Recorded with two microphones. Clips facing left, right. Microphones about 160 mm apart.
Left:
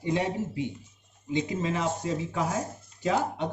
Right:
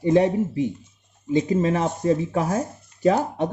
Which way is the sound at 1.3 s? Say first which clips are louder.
Right 8 dB; 45° right (ahead or behind).